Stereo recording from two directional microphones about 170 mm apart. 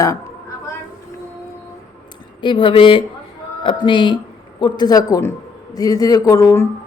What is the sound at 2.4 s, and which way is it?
Speech, 30° left (ahead or behind).